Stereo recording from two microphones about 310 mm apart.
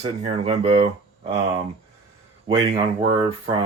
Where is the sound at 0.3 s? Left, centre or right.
Centre.